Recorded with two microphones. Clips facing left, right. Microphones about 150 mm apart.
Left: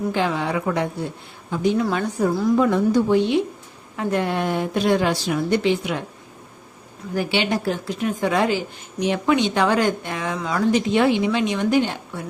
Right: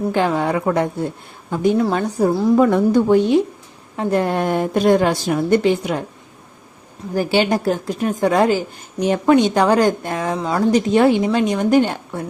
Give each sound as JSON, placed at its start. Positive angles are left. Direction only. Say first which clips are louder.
{"t": 0.1, "sound": "a woman's voice", "louder": "right 6 dB", "side_deg": -50}
{"t": 2.6, "sound": "speech", "louder": "right 4 dB", "side_deg": -55}
{"t": 3.9, "sound": "speech", "louder": "right 4 dB", "side_deg": -35}
{"t": 7.1, "sound": "speech", "louder": "right 5 dB", "side_deg": -40}